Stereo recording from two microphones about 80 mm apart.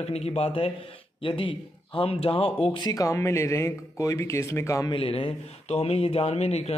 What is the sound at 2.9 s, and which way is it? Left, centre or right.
Speech, left.